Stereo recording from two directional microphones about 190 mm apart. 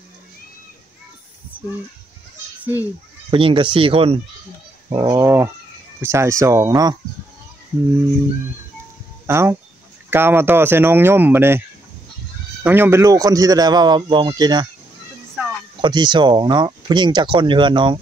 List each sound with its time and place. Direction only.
2.6 s speech: 10° right (ahead or behind)
3.3 s speech: 25° right (ahead or behind)
9.2 s a sound: 15° right (ahead or behind)
10.0 s speech: 10° right (ahead or behind)
12.6 s speech: 10° right (ahead or behind)
15.4 s a sound: 5° right (ahead or behind)
15.8 s speech: 25° right (ahead or behind)